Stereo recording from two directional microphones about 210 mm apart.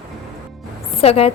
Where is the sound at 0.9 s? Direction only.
30° left (ahead or behind).